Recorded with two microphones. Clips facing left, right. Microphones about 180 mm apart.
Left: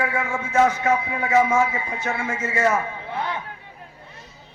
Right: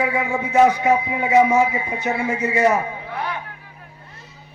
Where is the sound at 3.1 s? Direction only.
20° left (ahead or behind).